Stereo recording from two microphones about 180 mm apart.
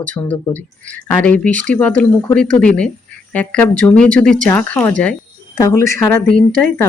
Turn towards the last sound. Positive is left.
turn(degrees=10)  # may be behind; listen again after turning